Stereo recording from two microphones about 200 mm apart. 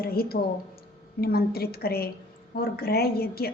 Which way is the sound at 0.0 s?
50° left (ahead or behind).